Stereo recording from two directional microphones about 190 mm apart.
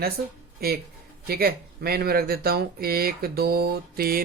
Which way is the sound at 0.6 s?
55° right (ahead or behind).